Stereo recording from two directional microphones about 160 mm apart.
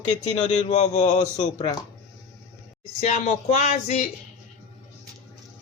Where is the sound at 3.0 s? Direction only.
50° left (ahead or behind).